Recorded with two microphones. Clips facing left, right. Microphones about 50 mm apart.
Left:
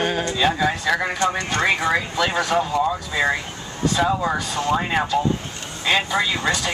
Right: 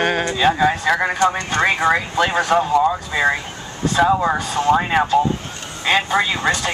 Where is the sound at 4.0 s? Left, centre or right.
Right.